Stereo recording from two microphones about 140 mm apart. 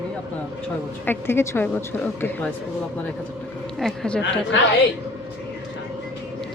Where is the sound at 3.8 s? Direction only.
5° left (ahead or behind).